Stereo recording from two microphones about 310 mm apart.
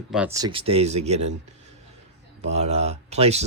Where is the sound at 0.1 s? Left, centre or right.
Centre.